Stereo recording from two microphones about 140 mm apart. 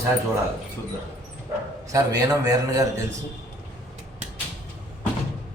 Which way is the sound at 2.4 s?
25° right (ahead or behind).